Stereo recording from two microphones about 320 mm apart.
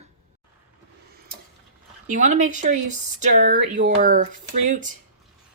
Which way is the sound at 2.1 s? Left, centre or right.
Right.